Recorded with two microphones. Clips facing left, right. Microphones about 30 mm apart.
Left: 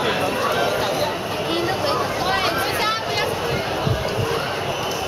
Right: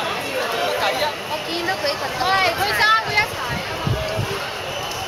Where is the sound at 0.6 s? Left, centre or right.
Right.